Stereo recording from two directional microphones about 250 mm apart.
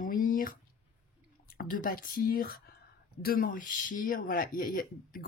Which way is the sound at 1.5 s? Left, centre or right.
Left.